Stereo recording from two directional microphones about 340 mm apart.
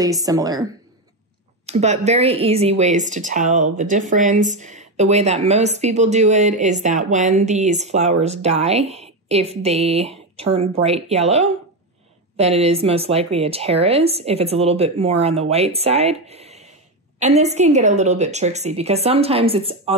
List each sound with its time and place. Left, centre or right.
0.0 s speech: centre
1.7 s speech: centre